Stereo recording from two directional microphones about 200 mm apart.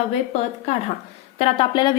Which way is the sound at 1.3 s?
30° left (ahead or behind).